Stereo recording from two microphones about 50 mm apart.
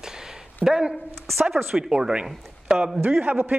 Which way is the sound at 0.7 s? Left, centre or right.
Centre.